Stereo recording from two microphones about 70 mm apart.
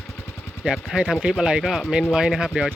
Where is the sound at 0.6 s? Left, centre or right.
Centre.